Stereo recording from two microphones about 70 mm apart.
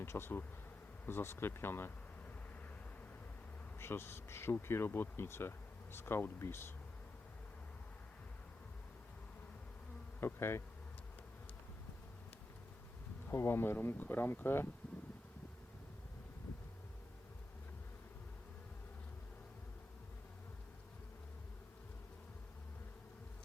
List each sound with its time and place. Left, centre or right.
0.0 s speech: left
3.8 s speech: left
10.2 s bee: left
13.3 s speech: left